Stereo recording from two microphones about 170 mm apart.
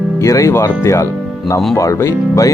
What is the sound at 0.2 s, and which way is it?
Speech, 20° left (ahead or behind).